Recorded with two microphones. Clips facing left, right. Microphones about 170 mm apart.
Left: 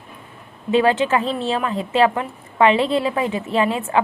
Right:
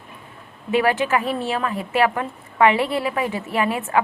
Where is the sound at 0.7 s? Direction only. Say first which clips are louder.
Left 3 dB; 25° left (ahead or behind).